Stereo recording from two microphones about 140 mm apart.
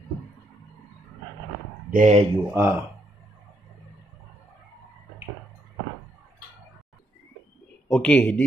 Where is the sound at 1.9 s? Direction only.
60° right (ahead or behind).